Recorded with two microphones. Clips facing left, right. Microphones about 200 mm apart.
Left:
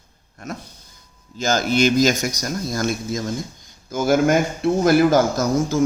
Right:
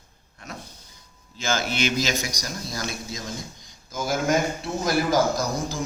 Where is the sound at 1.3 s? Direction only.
40° left (ahead or behind).